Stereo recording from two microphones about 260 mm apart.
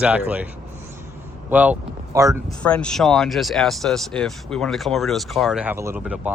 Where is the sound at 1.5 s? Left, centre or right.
Centre.